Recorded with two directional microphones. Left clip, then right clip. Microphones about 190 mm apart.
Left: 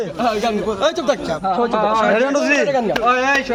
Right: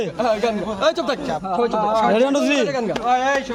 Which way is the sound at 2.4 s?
75° right (ahead or behind).